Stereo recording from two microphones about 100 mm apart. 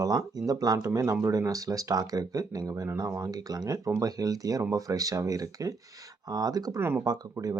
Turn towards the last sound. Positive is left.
turn(degrees=-35)  # may be behind; listen again after turning